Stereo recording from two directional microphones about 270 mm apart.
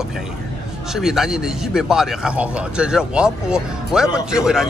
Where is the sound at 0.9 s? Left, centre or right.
Centre.